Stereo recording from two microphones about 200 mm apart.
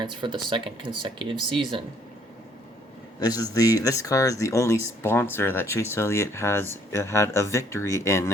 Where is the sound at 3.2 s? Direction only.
20° left (ahead or behind).